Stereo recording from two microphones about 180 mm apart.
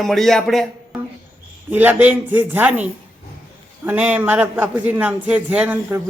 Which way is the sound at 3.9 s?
10° right (ahead or behind).